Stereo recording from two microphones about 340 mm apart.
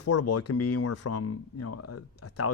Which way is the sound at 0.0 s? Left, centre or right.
Left.